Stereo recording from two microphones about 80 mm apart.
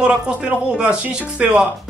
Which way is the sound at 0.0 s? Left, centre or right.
Centre.